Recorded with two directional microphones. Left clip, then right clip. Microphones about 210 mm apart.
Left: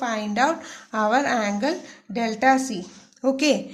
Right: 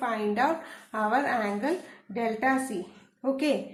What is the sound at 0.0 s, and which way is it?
A woman's voice, 50° left (ahead or behind).